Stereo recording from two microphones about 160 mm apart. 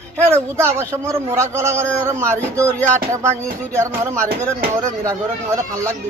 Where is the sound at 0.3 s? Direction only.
15° right (ahead or behind).